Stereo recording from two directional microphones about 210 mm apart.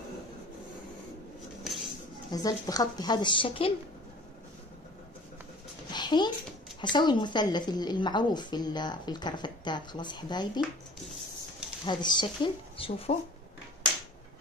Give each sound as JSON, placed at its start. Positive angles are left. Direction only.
{"t": 1.6, "sound": "dishes", "side_deg": 0}
{"t": 2.3, "sound": "a woman's voice", "side_deg": 15}
{"t": 5.9, "sound": "a sound", "side_deg": 20}
{"t": 6.8, "sound": "a woman's voice", "side_deg": 20}
{"t": 11.8, "sound": "a woman's voice", "side_deg": 20}